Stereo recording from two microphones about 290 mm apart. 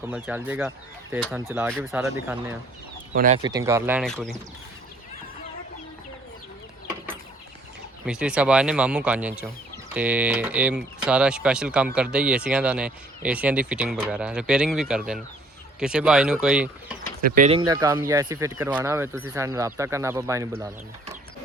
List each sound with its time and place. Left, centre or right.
0.0 s speech: centre
3.2 s speech: right; by 4.4 s centre
8.0 s speech: centre
17.2 s speech: right
17.7 s speech: centre